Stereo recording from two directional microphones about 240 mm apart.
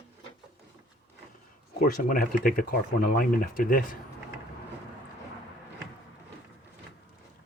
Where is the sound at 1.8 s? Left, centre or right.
Left.